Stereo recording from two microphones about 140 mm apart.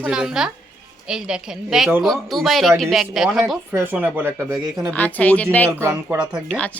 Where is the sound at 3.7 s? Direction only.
15° right (ahead or behind).